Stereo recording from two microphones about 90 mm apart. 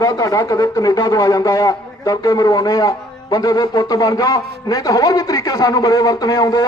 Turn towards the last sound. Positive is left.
turn(degrees=40)  # may be behind; listen again after turning